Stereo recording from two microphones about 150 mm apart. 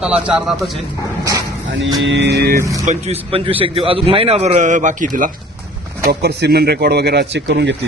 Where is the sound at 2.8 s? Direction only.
50° right (ahead or behind).